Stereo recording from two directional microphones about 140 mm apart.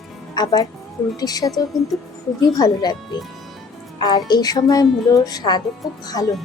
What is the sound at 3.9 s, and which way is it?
A woman's voice, 30° left (ahead or behind).